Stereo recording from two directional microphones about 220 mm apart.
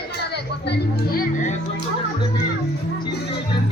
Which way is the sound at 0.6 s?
50° left (ahead or behind).